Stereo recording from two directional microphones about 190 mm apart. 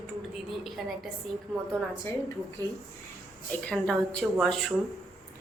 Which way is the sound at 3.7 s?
5° left (ahead or behind).